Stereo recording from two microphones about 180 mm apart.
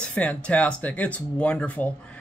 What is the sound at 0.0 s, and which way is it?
Speech, 5° left (ahead or behind).